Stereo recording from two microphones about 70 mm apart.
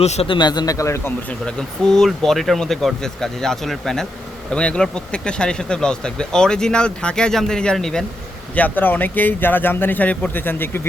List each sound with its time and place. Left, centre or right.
0.3 s speech: left
1.3 s speech: centre
8.5 s speech: left